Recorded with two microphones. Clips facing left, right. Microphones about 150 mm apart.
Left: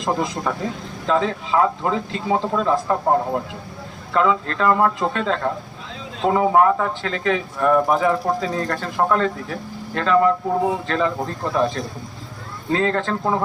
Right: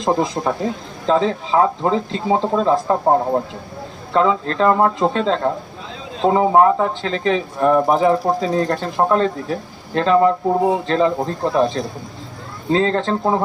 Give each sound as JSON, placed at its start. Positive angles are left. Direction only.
{"t": 0.0, "sound": "speech", "side_deg": -30}